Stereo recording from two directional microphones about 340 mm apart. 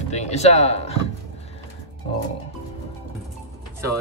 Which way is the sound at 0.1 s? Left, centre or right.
Centre.